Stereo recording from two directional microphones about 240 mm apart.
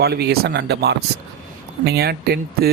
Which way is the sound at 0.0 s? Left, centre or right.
Right.